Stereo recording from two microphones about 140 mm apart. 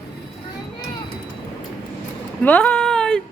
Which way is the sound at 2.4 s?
10° left (ahead or behind).